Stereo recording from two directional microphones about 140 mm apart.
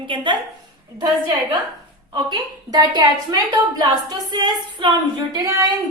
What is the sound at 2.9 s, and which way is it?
A woman's voice, 30° right (ahead or behind).